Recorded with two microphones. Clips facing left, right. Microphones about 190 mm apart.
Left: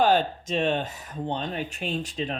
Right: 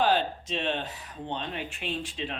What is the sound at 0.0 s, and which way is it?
Speech, 45° left (ahead or behind).